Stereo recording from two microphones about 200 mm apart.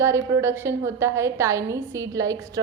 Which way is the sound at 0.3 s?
10° right (ahead or behind).